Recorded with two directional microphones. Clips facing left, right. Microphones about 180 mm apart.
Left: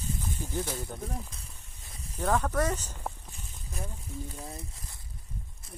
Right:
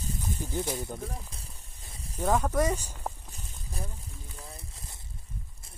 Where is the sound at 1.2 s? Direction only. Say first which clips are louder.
Right 1 dB; 30° right (ahead or behind).